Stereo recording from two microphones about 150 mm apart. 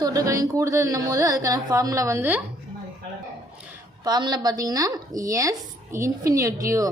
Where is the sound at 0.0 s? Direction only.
25° right (ahead or behind).